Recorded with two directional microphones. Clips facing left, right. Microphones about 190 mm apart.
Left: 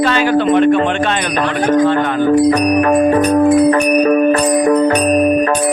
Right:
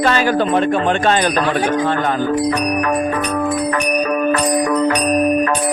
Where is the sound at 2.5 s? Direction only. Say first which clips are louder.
Left 6 dB; 30° left (ahead or behind).